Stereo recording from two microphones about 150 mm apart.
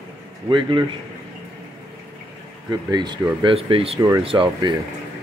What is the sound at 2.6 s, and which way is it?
Speech, 30° right (ahead or behind).